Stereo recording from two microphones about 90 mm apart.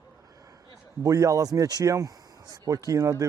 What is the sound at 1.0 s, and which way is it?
Speech, 40° right (ahead or behind).